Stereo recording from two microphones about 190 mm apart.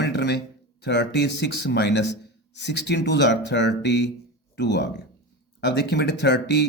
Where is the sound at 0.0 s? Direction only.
65° left (ahead or behind).